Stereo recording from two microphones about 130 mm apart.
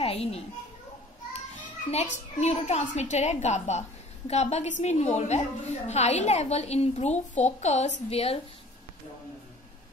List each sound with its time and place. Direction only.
0.0 s children playing: 50° left (ahead or behind)
1.9 s a woman's voice: 55° left (ahead or behind)